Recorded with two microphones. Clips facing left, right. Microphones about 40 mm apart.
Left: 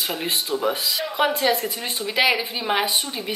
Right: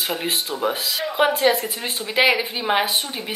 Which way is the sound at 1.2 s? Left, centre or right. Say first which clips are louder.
Right 3 dB; right.